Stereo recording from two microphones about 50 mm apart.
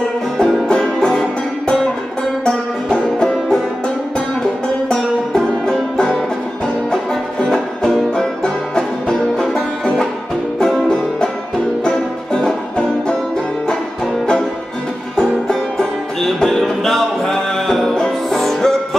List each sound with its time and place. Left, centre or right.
0.4 s music: centre
2.4 s banjo: centre
4.4 s music: centre
9.4 s music: centre
12.4 s music: centre
15.1 s music: centre